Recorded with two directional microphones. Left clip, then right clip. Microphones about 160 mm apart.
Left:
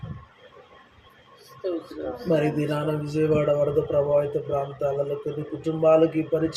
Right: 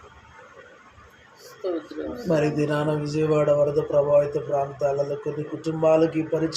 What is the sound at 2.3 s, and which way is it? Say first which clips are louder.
Speech: right 1 dB; 15° right (ahead or behind).